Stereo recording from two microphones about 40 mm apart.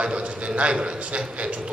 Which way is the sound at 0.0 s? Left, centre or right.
Right.